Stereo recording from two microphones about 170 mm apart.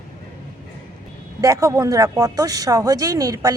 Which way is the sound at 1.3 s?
20° right (ahead or behind).